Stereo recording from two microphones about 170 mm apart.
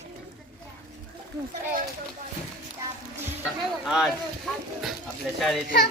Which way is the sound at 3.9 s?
Centre (ahead or behind).